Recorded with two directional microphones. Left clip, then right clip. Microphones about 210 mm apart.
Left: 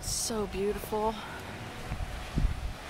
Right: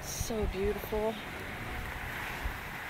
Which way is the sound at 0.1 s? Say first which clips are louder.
Left 4 dB; 40° left (ahead or behind).